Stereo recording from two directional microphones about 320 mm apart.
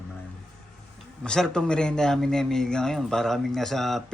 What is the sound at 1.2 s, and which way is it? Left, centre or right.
A man's voice, centre.